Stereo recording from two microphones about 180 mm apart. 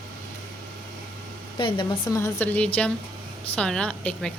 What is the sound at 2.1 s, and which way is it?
A woman's voice, 15° left (ahead or behind).